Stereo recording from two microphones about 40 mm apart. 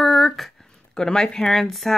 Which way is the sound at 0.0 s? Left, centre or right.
Centre.